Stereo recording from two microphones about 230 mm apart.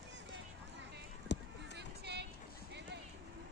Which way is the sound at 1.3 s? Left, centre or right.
Left.